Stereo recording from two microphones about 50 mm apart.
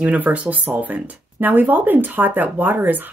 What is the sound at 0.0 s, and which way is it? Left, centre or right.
Speech, right.